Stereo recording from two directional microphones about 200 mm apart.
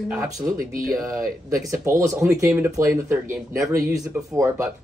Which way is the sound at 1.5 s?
15° right (ahead or behind).